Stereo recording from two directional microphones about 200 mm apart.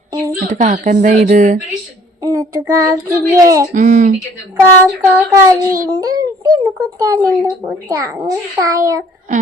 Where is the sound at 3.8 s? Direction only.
40° right (ahead or behind).